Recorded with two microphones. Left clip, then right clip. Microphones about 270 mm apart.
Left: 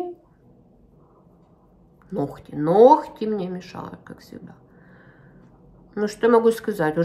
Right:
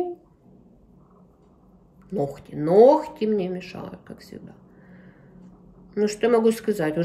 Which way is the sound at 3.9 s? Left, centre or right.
Left.